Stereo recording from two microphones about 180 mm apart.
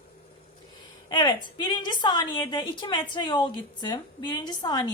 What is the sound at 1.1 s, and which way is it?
A woman's voice, 25° left (ahead or behind).